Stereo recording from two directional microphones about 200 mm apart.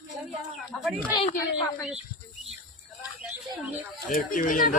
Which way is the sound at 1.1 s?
25° left (ahead or behind).